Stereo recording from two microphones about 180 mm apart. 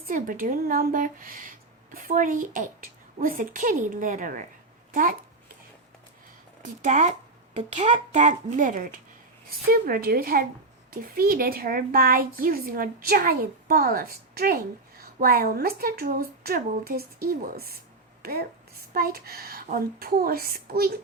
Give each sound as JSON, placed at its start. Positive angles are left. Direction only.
{"t": 0.0, "sound": "a child's voice", "side_deg": -50}
{"t": 6.6, "sound": "a woman's voice", "side_deg": -40}
{"t": 18.2, "sound": "a sound", "side_deg": -60}
{"t": 18.9, "sound": "a woman's voice", "side_deg": -55}